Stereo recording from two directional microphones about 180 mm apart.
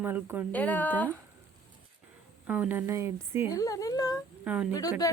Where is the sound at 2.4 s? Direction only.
5° right (ahead or behind).